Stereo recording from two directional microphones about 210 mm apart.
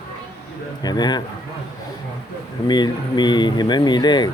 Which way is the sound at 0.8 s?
20° left (ahead or behind).